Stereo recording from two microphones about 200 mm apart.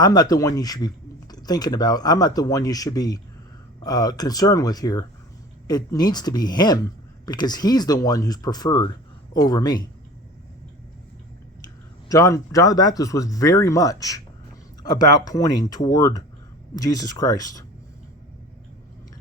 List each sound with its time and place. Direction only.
0.0 s speech: 20° left (ahead or behind)
11.6 s speech: 15° left (ahead or behind)